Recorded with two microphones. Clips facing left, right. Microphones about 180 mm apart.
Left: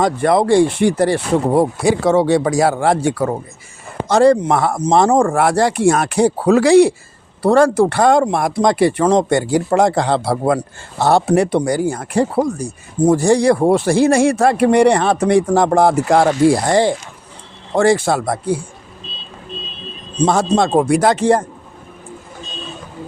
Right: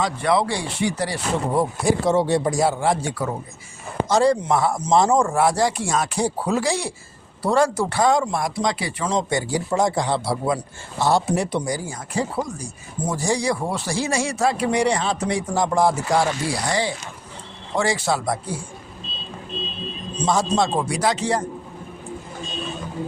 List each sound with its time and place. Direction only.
0.0 s speech: 50° left (ahead or behind)
20.2 s speech: 60° left (ahead or behind)